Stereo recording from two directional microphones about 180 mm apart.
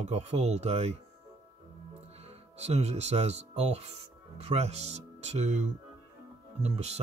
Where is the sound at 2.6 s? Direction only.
35° right (ahead or behind).